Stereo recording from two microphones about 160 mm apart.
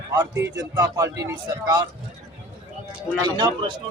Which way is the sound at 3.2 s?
25° right (ahead or behind).